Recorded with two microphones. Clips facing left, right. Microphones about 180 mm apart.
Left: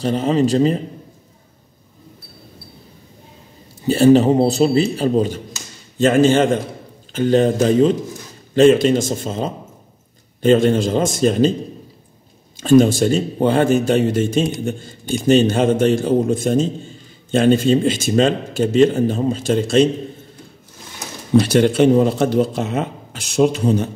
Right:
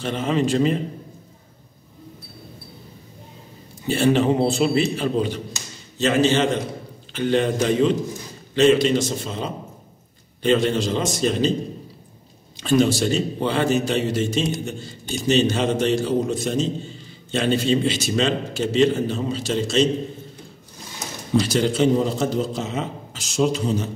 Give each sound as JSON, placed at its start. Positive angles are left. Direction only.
{"t": 0.0, "sound": "a man's voice", "side_deg": 35}
{"t": 3.8, "sound": "a man's voice", "side_deg": 40}
{"t": 12.5, "sound": "a man's voice", "side_deg": 45}
{"t": 21.4, "sound": "speech", "side_deg": 60}